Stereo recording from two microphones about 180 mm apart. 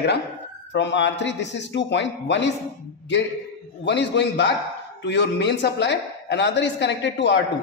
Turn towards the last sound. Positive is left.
turn(degrees=80)